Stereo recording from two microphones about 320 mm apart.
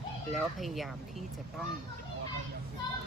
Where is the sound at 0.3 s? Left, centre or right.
Centre.